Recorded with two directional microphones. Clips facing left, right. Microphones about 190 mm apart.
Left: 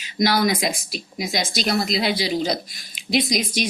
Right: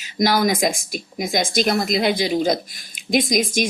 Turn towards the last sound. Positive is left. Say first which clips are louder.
# right 3 dB
turn(degrees=-50)  # may be behind; listen again after turning